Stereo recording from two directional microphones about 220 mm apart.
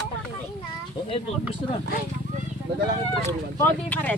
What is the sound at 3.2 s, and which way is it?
Speech, 10° left (ahead or behind).